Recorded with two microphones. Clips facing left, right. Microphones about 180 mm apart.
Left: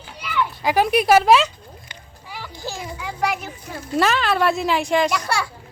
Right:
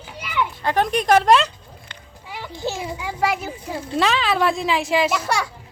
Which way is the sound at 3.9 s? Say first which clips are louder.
Left 1 dB; centre (ahead or behind).